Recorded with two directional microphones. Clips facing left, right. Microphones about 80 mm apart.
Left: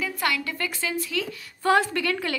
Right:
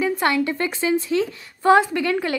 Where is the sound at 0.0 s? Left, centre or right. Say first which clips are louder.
Right 7 dB; right.